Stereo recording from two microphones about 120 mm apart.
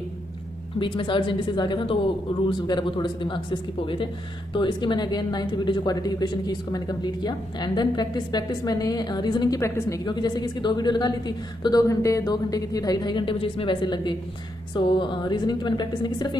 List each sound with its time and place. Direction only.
0.7 s speech: 45° left (ahead or behind)
9.6 s a woman's voice: 25° left (ahead or behind)
10.0 s speech: 35° left (ahead or behind)